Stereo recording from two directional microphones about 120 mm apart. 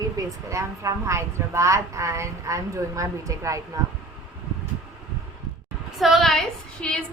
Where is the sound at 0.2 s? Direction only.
25° right (ahead or behind).